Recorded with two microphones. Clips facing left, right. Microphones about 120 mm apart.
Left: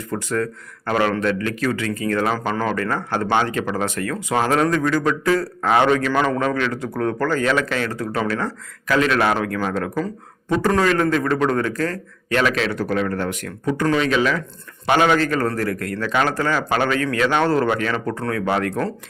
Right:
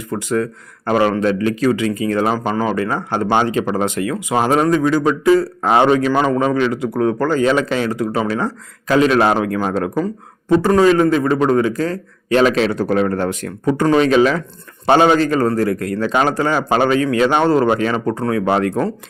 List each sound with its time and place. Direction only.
0.1 s a man's voice: 15° right (ahead or behind)